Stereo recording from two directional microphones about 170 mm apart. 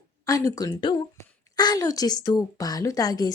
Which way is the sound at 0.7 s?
30° left (ahead or behind).